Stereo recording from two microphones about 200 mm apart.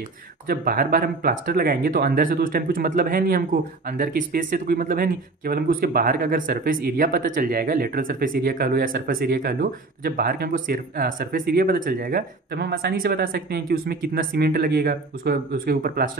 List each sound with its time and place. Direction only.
0.5 s speech: 45° right (ahead or behind)